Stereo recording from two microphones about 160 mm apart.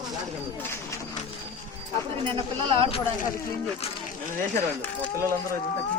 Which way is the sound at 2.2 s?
35° right (ahead or behind).